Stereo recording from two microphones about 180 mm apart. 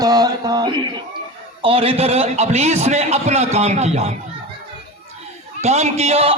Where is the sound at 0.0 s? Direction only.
20° right (ahead or behind).